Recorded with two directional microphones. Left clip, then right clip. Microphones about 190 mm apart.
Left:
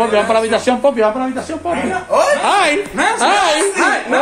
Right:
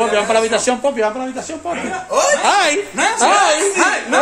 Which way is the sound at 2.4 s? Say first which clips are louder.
Left 1 dB; 25° right (ahead or behind).